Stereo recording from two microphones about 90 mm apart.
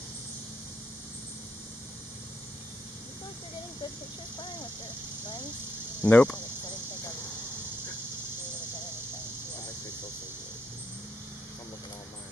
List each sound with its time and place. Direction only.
6.0 s speech: 20° left (ahead or behind)